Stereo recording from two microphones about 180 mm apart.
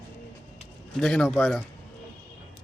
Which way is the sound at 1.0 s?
5° left (ahead or behind).